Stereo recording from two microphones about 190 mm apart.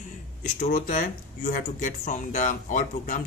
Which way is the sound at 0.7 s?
45° left (ahead or behind).